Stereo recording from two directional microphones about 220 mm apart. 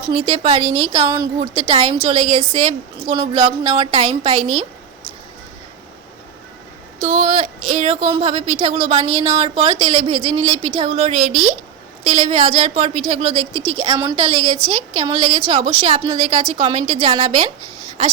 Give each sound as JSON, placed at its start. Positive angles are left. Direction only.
{"t": 0.1, "sound": "a woman's voice", "side_deg": -25}
{"t": 7.0, "sound": "a woman's voice", "side_deg": -30}
{"t": 13.4, "sound": "speech", "side_deg": 5}
{"t": 13.7, "sound": "a woman's voice", "side_deg": -25}